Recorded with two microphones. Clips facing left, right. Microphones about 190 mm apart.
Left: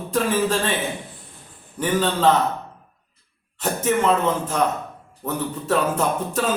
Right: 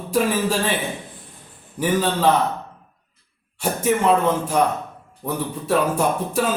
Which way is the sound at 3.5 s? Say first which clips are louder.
Right 1 dB; 10° right (ahead or behind).